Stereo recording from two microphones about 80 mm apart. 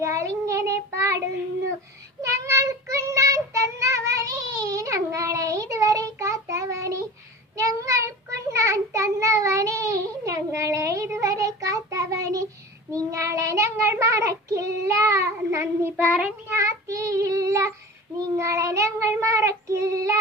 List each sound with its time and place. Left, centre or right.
0.0 s child singing: right
2.2 s child singing: right